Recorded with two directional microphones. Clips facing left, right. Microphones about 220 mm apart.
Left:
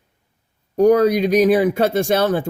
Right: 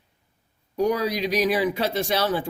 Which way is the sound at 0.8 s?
50° left (ahead or behind).